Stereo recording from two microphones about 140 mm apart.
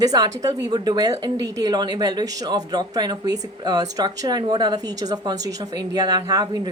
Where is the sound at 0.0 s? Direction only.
25° right (ahead or behind).